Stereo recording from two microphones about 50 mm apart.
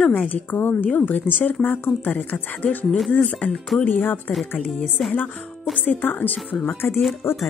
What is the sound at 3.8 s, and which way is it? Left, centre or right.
Speech, left.